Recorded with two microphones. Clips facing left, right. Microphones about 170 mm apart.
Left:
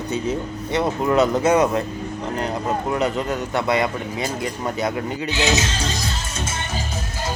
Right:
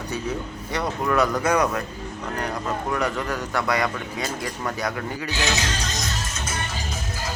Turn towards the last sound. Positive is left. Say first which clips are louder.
# left 3 dB
turn(degrees=30)  # may be behind; listen again after turning